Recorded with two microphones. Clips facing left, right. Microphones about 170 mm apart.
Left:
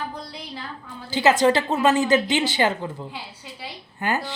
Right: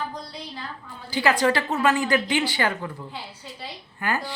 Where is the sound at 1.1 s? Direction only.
25° left (ahead or behind).